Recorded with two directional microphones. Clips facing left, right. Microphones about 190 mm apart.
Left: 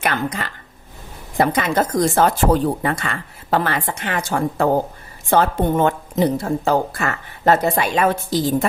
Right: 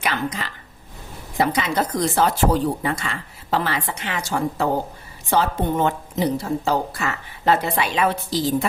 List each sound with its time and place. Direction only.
0.0 s speech: 55° left (ahead or behind)